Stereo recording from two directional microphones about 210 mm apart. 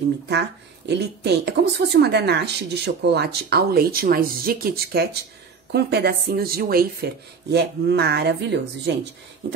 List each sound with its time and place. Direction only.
0.3 s a woman's voice: 50° right (ahead or behind)